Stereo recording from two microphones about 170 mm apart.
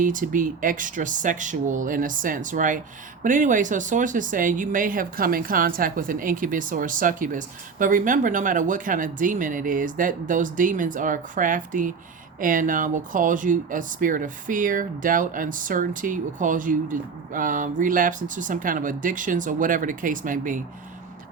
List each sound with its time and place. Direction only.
0.0 s speech: 50° right (ahead or behind)